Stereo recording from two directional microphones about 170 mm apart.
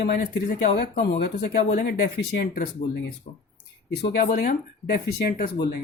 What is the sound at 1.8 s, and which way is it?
Speech, 80° left.